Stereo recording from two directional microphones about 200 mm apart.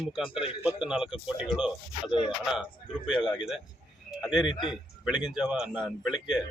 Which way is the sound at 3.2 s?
Centre (ahead or behind).